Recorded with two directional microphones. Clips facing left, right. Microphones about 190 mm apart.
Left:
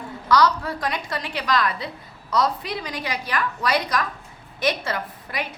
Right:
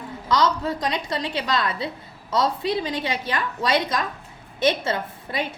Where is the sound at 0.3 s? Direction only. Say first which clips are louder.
Left 2 dB; 20° right (ahead or behind).